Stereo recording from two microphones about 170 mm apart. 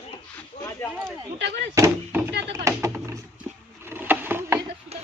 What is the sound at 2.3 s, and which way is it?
Speech, 90° right.